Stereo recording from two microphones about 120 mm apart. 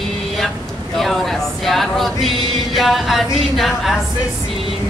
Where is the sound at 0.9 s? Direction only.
Centre (ahead or behind).